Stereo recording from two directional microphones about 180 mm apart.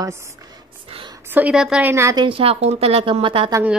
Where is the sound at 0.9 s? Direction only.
30° right (ahead or behind).